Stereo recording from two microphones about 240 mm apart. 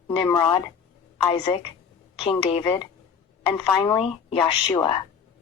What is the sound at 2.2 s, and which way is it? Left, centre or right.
A woman's voice, left.